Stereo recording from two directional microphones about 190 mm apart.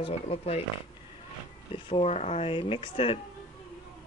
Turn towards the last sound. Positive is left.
turn(degrees=30)  # may be behind; listen again after turning